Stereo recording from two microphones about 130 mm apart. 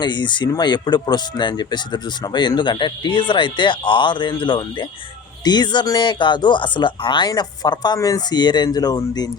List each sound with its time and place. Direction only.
0.0 s speech: 35° left (ahead or behind)